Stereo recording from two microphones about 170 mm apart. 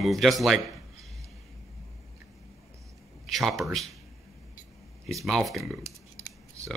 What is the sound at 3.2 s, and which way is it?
Speech, centre (ahead or behind).